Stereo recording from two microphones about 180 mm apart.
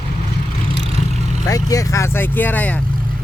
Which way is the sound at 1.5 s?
20° left (ahead or behind).